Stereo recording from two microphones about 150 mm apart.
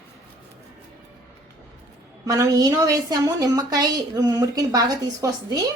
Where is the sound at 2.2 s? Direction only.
25° right (ahead or behind).